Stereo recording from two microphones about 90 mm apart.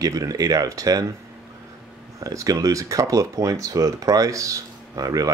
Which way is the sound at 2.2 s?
40° right (ahead or behind).